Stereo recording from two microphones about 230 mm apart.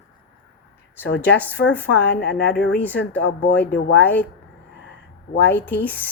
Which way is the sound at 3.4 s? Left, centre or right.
Left.